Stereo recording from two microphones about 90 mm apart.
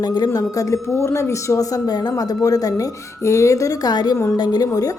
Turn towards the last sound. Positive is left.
turn(degrees=45)  # may be behind; listen again after turning